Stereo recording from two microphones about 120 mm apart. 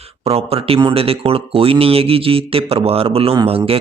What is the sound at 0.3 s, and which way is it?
Speech, 55° right (ahead or behind).